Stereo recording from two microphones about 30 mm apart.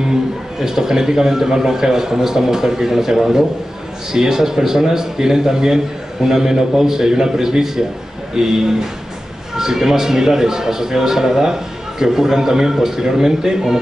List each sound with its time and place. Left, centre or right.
0.6 s speech: centre